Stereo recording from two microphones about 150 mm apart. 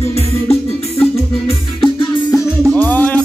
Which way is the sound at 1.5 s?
35° left (ahead or behind).